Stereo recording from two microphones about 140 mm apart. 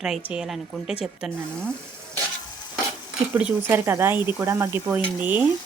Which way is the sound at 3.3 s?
15° right (ahead or behind).